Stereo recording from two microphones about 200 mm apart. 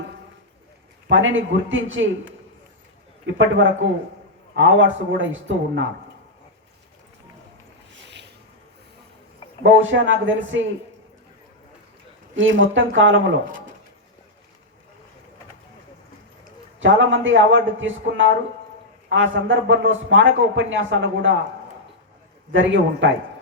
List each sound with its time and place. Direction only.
1.1 s a man's voice: 75° right (ahead or behind)
3.3 s a man's voice: 70° right (ahead or behind)
9.6 s a man's voice: 70° right (ahead or behind)
12.4 s a man's voice: 75° right (ahead or behind)
16.8 s a man's voice: 70° right (ahead or behind)
22.5 s a man's voice: 65° right (ahead or behind)